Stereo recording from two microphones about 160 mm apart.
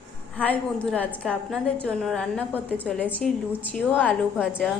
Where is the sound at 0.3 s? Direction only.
10° left (ahead or behind).